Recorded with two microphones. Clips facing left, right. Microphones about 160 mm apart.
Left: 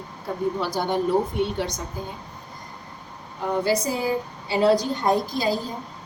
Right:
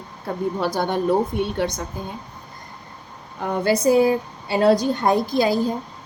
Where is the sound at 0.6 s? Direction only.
60° right (ahead or behind).